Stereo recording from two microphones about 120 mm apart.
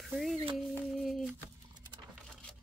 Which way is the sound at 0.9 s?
Centre (ahead or behind).